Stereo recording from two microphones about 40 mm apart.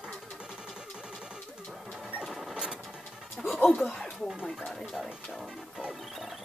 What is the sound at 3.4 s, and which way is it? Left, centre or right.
Music, centre.